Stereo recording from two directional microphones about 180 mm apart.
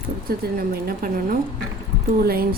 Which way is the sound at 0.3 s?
55° right (ahead or behind).